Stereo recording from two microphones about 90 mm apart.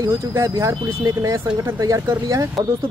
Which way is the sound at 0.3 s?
35° right (ahead or behind).